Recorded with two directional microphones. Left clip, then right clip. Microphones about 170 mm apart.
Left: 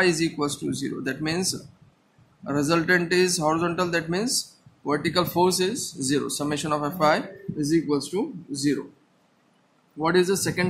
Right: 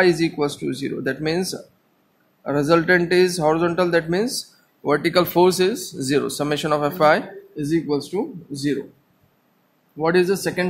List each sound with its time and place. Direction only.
0.0 s speech: 30° right (ahead or behind)
9.9 s speech: 35° right (ahead or behind)